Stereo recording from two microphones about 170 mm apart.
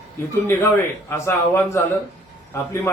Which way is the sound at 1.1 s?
15° left (ahead or behind).